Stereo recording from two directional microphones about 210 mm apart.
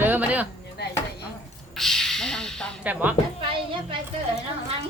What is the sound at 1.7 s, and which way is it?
Speech, centre (ahead or behind).